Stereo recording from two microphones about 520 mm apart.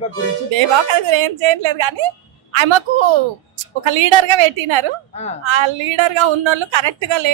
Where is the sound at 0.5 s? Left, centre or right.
Right.